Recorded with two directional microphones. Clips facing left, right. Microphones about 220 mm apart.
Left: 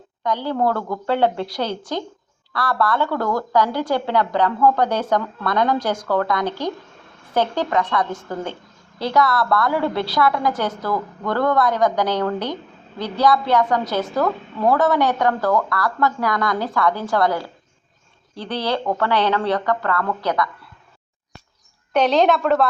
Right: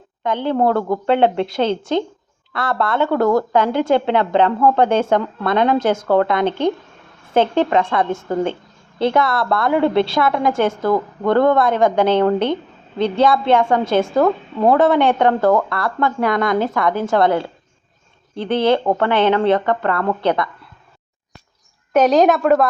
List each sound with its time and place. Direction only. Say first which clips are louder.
0.2 s a woman's voice: right 4 dB; 25° right (ahead or behind)
21.9 s a woman's voice: right 3 dB; 5° right (ahead or behind)